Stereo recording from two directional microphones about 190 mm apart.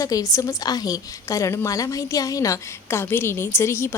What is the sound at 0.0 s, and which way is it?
A woman's voice, 15° left (ahead or behind).